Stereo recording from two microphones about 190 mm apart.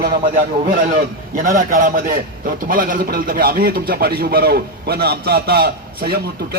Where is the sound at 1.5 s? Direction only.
45° right (ahead or behind).